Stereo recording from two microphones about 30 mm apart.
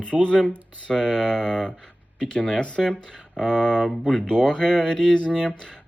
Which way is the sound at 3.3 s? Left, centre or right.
Left.